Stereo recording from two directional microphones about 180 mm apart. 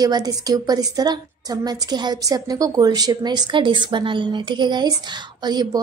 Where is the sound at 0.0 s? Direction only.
20° right (ahead or behind).